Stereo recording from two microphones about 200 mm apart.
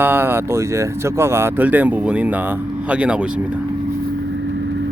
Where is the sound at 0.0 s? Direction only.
10° right (ahead or behind).